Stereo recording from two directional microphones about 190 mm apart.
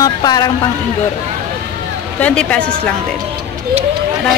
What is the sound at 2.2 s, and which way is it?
Speech, 5° left (ahead or behind).